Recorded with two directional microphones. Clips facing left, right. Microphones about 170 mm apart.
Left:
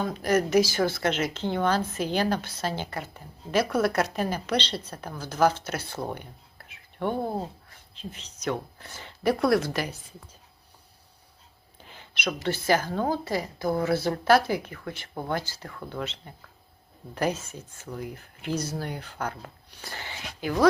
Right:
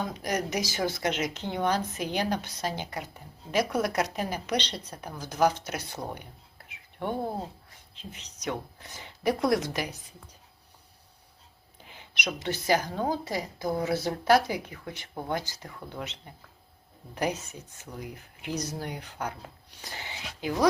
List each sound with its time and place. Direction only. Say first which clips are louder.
0.2 s a woman's voice: left 12 dB; 15° right (ahead or behind)
7.9 s a woman's voice: left 5 dB; 15° right (ahead or behind)
11.9 s a woman's voice: left 3 dB; 15° right (ahead or behind)
17.2 s a woman's voice: left 2 dB; 15° right (ahead or behind)